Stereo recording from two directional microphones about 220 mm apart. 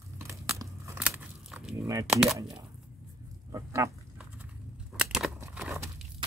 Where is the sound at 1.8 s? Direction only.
15° right (ahead or behind).